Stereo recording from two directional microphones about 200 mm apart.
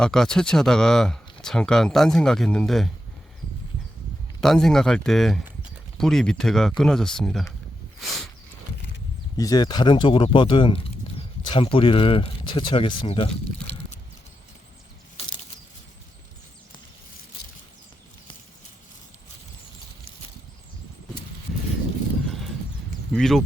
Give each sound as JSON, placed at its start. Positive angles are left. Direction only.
{"t": 0.0, "sound": "speech", "side_deg": 5}
{"t": 4.4, "sound": "speech", "side_deg": 5}
{"t": 8.0, "sound": "a sound", "side_deg": 0}
{"t": 9.4, "sound": "speech", "side_deg": 20}
{"t": 22.3, "sound": "horse", "side_deg": 0}
{"t": 23.1, "sound": "speech", "side_deg": 0}